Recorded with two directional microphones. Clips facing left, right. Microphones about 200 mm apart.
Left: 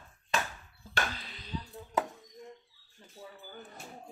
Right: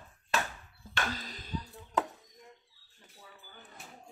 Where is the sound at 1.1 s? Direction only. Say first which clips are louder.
Right 1 dB; 40° right (ahead or behind).